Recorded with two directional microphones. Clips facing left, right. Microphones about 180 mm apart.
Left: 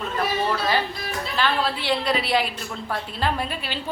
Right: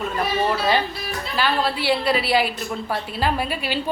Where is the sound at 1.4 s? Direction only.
5° right (ahead or behind).